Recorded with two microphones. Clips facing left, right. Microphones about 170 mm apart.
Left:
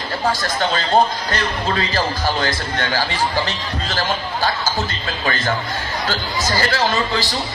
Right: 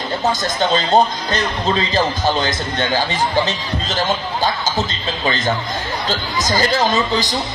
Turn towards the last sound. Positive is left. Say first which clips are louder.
# right 2 dB
turn(degrees=-20)  # may be behind; listen again after turning